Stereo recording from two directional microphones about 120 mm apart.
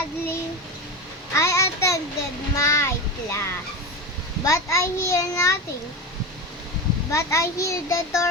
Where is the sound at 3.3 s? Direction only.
20° left (ahead or behind).